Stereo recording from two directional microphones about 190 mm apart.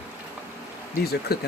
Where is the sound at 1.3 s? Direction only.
55° left (ahead or behind).